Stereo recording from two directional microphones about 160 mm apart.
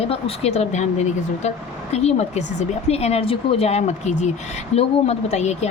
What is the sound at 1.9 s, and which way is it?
A woman's voice, 45° left (ahead or behind).